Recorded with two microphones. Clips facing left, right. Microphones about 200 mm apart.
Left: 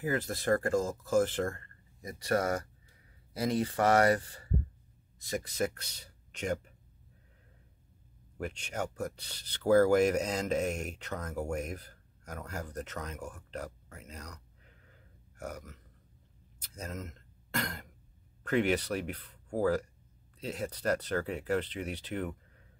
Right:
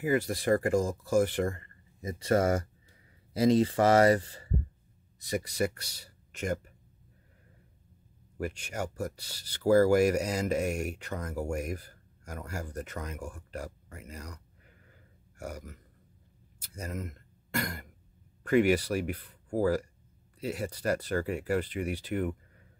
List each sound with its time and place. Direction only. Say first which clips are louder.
0.0 s speech: right 4 dB; 10° right (ahead or behind); by 4.5 s 25° right (ahead or behind)
5.3 s speech: right 2 dB; 10° right (ahead or behind)
8.4 s speech: right 2 dB; 5° right (ahead or behind)